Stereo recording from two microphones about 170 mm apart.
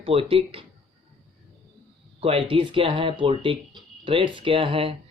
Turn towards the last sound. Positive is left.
turn(degrees=-30)  # may be behind; listen again after turning